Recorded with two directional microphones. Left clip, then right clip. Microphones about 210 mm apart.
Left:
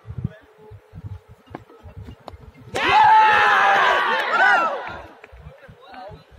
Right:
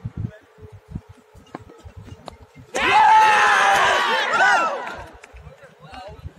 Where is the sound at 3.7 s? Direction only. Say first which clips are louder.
Even; 20° left (ahead or behind).